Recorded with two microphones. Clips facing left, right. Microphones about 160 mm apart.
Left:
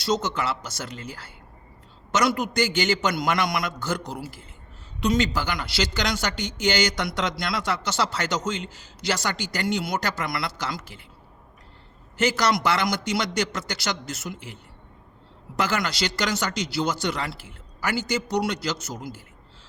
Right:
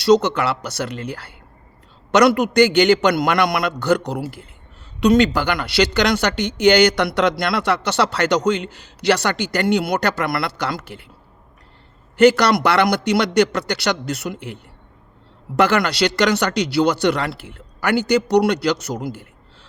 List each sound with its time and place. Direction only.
0.0 s a man's voice: 70° right (ahead or behind)
12.1 s speech: 65° right (ahead or behind)